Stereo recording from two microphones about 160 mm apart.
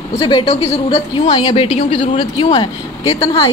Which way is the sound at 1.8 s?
35° left (ahead or behind).